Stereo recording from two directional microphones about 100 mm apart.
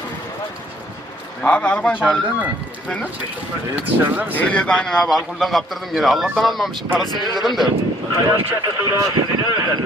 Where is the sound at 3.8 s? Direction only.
15° right (ahead or behind).